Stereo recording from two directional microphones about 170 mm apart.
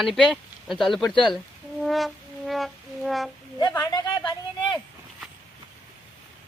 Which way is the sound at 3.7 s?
20° left (ahead or behind).